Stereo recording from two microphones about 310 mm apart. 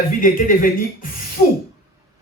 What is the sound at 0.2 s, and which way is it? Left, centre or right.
Speech, left.